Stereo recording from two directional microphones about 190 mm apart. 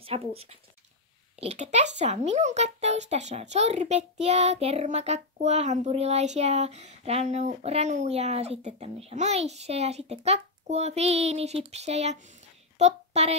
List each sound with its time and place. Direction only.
0.0 s a woman's voice: 30° right (ahead or behind)